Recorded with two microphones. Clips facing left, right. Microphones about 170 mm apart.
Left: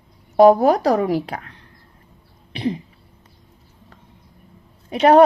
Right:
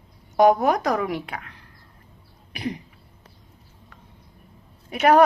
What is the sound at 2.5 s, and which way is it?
Cough, 25° left (ahead or behind).